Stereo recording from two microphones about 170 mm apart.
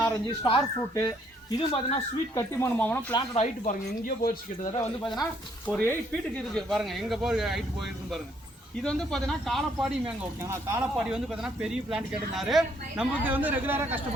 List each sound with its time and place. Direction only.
0.3 s speech: 30° left (ahead or behind)
2.3 s speech: 15° left (ahead or behind)
3.3 s speech: 45° left (ahead or behind)
5.6 s speech: 10° left (ahead or behind)
8.7 s speech: 5° left (ahead or behind)
10.4 s speech: 15° right (ahead or behind)
10.9 s speech: 5° right (ahead or behind)